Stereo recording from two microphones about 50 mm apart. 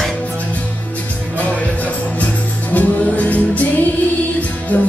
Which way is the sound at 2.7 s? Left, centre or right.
Left.